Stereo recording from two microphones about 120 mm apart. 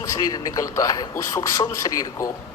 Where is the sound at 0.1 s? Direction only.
30° left (ahead or behind).